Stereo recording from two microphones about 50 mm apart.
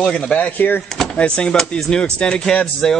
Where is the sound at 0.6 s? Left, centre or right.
Left.